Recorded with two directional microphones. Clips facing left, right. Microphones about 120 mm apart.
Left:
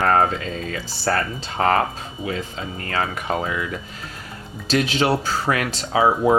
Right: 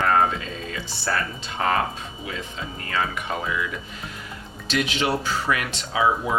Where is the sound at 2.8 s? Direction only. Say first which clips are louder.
Left 2 dB; 40° left (ahead or behind).